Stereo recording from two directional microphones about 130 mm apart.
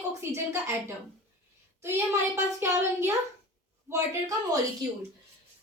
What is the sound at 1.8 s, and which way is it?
Speech, 20° right (ahead or behind).